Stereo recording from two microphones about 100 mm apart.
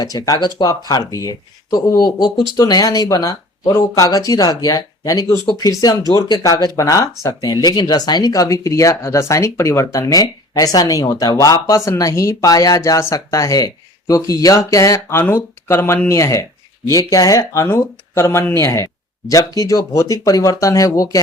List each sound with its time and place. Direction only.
0.0 s speech: 40° left (ahead or behind)